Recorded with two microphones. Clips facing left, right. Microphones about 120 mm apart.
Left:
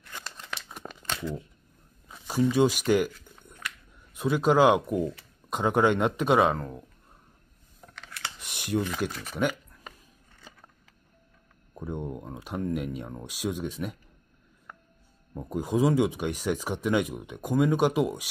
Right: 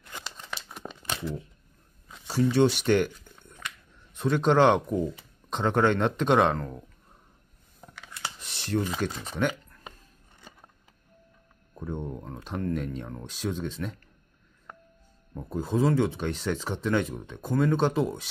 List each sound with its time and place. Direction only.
0.2 s crumpling: centre (ahead or behind)
2.0 s a sound: 10° left (ahead or behind)
2.5 s speech: 10° left (ahead or behind)
4.1 s speech: 10° left (ahead or behind)
7.8 s scissors: 10° right (ahead or behind)
8.4 s computer keyboard: 10° left (ahead or behind)
11.7 s speech: 10° left (ahead or behind)
15.4 s speech: 15° left (ahead or behind)